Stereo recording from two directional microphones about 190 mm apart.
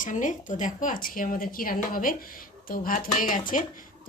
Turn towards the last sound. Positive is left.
turn(degrees=45)  # may be behind; listen again after turning